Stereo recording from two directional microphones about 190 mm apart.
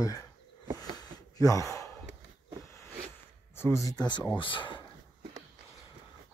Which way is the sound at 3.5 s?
15° left (ahead or behind).